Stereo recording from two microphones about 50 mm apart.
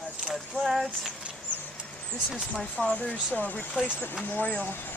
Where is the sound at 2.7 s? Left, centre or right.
Left.